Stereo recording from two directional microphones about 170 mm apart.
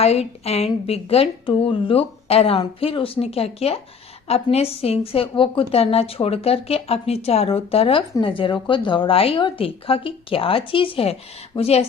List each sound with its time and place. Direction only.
0.0 s a woman's voice: 40° left (ahead or behind)